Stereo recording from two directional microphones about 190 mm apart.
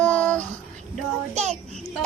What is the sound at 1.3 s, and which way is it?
Child singing, 35° right (ahead or behind).